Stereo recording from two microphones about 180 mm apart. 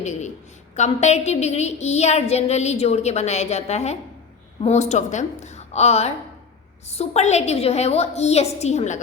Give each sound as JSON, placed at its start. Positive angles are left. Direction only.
{"t": 0.0, "sound": "a woman's voice", "side_deg": 40}